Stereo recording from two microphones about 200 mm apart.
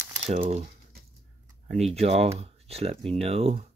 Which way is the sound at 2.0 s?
30° right (ahead or behind).